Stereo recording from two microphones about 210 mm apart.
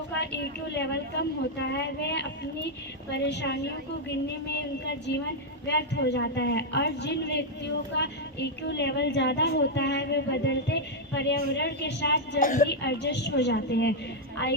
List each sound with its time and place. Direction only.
0.1 s a woman's voice: 55° left (ahead or behind)
4.9 s a woman's voice: 55° left (ahead or behind)
12.4 s a woman's voice: 40° left (ahead or behind)
12.6 s a woman's voice: 55° left (ahead or behind)